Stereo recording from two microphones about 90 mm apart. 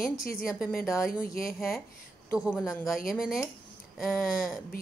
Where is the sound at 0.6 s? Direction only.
Centre (ahead or behind).